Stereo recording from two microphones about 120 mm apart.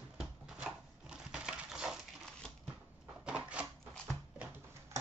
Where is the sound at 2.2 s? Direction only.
5° left (ahead or behind).